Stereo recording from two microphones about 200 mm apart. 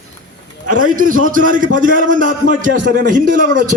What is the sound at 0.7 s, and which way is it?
A man's voice, 40° right (ahead or behind).